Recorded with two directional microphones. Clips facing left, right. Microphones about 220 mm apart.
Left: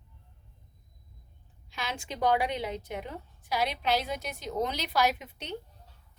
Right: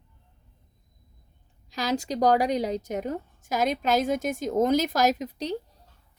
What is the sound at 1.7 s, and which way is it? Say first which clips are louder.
A woman's voice: right 10 dB; 40° right (ahead or behind).